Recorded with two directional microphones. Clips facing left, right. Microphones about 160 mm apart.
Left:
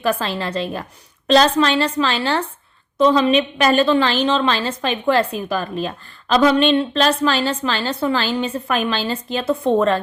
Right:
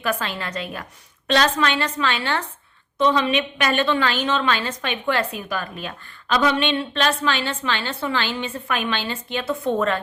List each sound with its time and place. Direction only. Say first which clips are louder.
0.0 s a woman's voice: left 5 dB; 30° left (ahead or behind)